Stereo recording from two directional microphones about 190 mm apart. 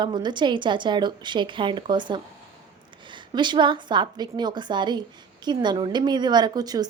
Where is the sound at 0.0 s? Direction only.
25° right (ahead or behind).